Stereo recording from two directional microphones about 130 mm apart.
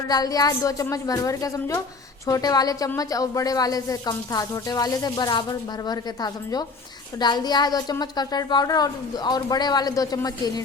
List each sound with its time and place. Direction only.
0.1 s a woman's voice: 30° left (ahead or behind)